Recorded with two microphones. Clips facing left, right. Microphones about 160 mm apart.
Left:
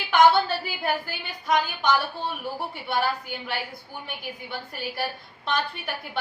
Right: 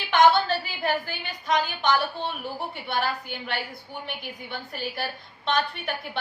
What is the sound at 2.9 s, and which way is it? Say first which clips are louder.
Speech: left 2 dB; 5° left (ahead or behind).